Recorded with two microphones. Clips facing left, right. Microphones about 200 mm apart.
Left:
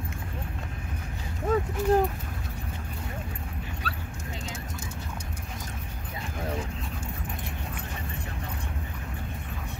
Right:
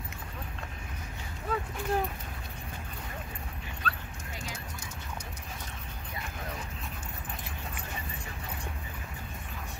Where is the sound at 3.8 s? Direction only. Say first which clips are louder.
Right 3 dB; 10° left (ahead or behind).